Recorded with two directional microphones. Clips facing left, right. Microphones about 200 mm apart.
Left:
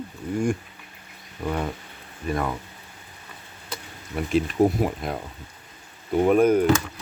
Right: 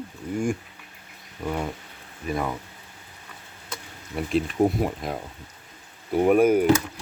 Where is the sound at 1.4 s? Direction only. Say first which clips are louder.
Left 1 dB; centre (ahead or behind).